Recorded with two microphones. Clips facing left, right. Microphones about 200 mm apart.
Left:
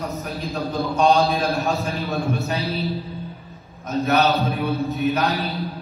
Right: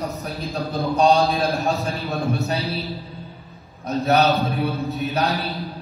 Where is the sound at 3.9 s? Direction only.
35° right (ahead or behind).